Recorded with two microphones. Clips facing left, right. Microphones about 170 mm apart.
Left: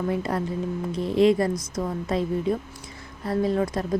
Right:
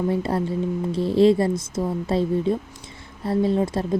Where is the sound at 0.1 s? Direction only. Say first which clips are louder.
Right 3 dB; 30° right (ahead or behind).